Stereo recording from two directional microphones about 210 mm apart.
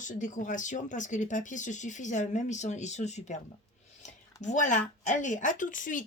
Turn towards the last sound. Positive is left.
turn(degrees=40)  # may be behind; listen again after turning